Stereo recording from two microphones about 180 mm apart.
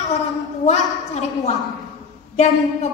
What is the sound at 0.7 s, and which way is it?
A woman's voice, 40° left (ahead or behind).